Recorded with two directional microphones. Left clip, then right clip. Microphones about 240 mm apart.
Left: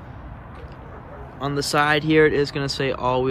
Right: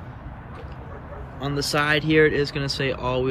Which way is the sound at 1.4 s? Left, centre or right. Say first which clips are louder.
Left 3 dB; centre.